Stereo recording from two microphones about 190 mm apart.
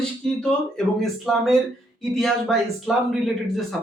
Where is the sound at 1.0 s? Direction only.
Centre (ahead or behind).